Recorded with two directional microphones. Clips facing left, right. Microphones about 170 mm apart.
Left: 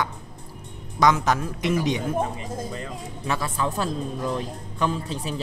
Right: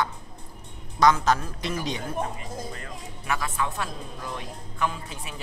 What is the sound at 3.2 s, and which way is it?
Speech, 25° left (ahead or behind).